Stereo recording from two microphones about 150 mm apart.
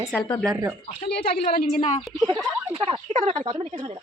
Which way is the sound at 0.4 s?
20° right (ahead or behind).